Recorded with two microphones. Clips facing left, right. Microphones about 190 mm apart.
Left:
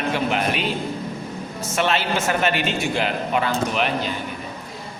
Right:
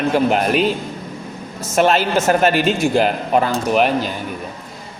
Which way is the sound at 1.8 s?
45° right (ahead or behind).